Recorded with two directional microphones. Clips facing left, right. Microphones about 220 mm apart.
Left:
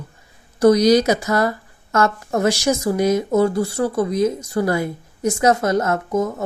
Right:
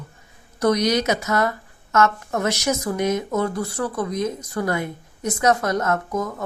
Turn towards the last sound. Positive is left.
turn(degrees=25)  # may be behind; listen again after turning